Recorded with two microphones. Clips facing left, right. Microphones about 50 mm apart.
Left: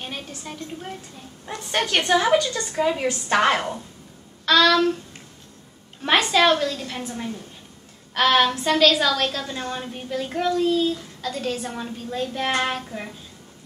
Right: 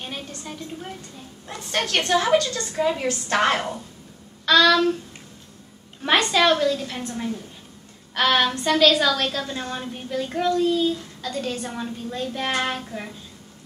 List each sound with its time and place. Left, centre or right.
0.0 s a woman's voice: centre
1.8 s a woman's voice: centre
2.7 s a woman's voice: centre
6.0 s a woman's voice: centre